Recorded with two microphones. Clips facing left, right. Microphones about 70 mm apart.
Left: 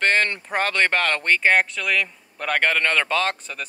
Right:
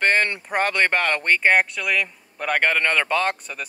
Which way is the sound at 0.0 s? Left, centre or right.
Centre.